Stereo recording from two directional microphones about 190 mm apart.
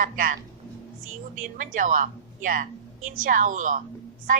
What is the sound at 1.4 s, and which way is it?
A woman's voice, 45° right (ahead or behind).